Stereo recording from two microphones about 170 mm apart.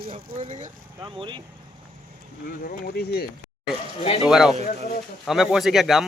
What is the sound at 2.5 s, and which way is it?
Speech, 60° left (ahead or behind).